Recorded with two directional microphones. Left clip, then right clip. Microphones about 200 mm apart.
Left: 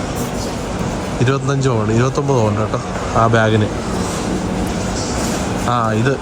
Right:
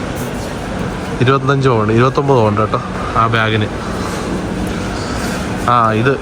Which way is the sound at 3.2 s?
15° left (ahead or behind).